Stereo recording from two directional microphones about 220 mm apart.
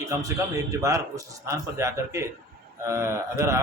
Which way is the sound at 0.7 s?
15° right (ahead or behind).